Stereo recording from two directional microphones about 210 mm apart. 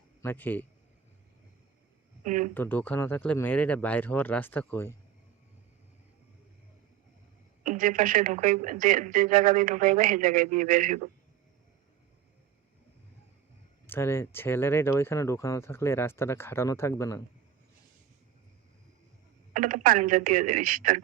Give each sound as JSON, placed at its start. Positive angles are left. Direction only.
{"t": 0.2, "sound": "a man's voice", "side_deg": 10}
{"t": 2.2, "sound": "speech", "side_deg": -35}
{"t": 2.6, "sound": "speech", "side_deg": 10}
{"t": 7.6, "sound": "speech", "side_deg": -40}
{"t": 13.8, "sound": "speech", "side_deg": 10}
{"t": 19.5, "sound": "speech", "side_deg": -40}